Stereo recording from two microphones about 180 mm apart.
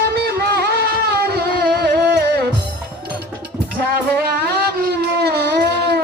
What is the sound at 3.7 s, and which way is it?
Music, 60° right (ahead or behind).